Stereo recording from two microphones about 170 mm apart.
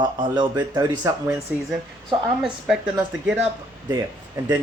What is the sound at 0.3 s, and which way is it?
Speech, 20° right (ahead or behind).